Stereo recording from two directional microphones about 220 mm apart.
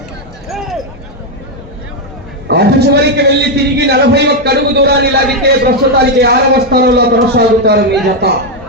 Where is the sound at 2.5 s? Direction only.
50° right (ahead or behind).